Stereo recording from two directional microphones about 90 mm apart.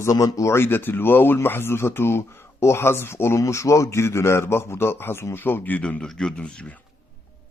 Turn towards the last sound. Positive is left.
turn(degrees=10)  # may be behind; listen again after turning